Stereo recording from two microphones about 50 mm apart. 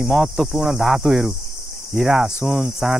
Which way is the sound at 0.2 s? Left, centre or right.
Centre.